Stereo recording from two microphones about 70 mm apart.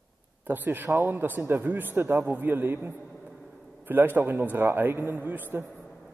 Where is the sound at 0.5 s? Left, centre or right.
Right.